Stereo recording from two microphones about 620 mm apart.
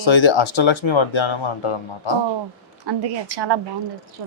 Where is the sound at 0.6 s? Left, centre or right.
Left.